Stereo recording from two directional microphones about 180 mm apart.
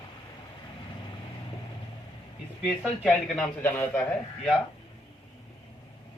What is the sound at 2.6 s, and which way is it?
Speech, centre (ahead or behind).